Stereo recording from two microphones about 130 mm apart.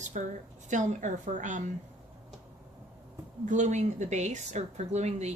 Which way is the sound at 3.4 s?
70° right (ahead or behind).